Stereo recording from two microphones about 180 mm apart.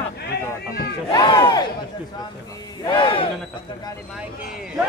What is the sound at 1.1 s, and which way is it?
Speech, 25° left (ahead or behind).